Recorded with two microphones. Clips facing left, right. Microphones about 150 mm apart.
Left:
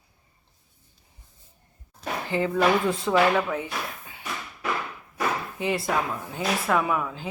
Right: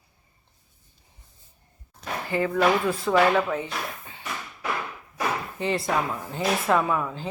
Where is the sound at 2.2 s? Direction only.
20° left (ahead or behind).